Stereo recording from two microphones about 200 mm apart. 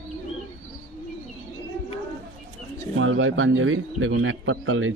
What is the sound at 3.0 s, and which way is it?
A man's voice, 75° right (ahead or behind).